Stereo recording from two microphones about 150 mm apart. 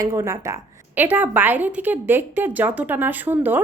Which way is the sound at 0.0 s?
20° right (ahead or behind).